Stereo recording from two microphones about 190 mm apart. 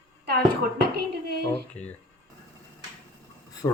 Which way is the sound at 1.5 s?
5° left (ahead or behind).